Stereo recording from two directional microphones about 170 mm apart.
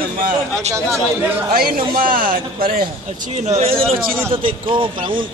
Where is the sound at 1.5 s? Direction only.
60° right (ahead or behind); by 3.7 s 40° right (ahead or behind).